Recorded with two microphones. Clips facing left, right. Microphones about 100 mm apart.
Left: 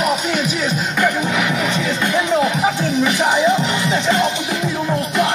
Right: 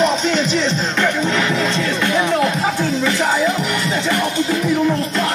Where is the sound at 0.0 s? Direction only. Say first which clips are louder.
Right 2 dB; 10° left (ahead or behind).